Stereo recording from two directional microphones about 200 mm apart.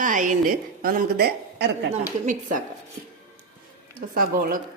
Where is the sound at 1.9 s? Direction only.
40° right (ahead or behind).